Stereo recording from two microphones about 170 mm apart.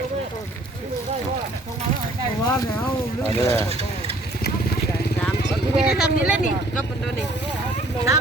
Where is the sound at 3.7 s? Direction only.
35° right (ahead or behind).